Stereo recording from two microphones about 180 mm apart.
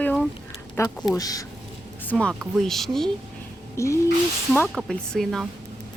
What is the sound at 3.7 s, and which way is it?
Speech, 15° left (ahead or behind).